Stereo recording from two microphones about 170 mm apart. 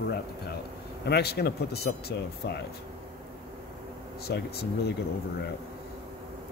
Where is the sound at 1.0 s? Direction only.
70° left (ahead or behind).